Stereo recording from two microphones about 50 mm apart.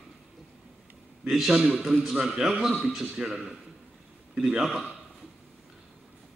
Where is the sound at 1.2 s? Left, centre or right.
Centre.